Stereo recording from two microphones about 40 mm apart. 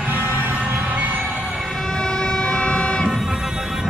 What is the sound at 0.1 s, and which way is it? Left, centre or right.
Music, right.